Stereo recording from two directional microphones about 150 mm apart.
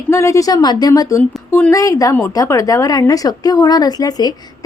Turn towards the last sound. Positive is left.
turn(degrees=25)  # may be behind; listen again after turning